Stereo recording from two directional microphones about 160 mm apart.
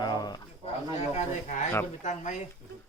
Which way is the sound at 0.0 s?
25° left (ahead or behind).